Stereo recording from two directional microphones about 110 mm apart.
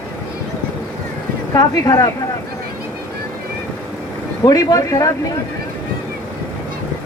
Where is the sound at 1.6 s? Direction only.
35° left (ahead or behind).